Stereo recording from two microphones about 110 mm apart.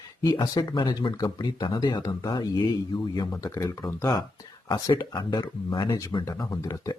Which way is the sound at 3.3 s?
30° left (ahead or behind).